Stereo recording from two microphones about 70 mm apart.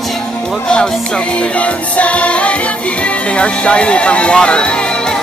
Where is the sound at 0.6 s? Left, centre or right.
Centre.